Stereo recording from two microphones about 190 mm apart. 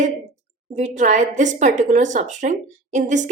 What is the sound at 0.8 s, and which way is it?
A woman's voice, 40° right (ahead or behind).